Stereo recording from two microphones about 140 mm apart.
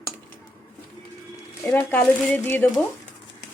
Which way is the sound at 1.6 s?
15° left (ahead or behind).